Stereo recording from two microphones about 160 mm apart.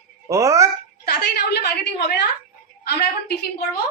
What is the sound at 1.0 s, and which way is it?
A woman's voice, 90° left.